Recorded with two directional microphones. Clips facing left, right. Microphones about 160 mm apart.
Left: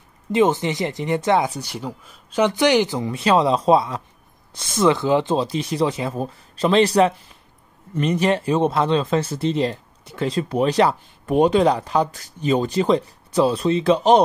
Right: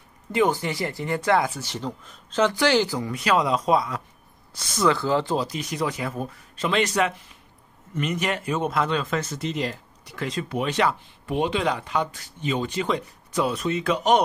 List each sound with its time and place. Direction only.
0.3 s speech: 20° left (ahead or behind)
1.6 s speech: 10° left (ahead or behind); by 14.2 s 30° left (ahead or behind)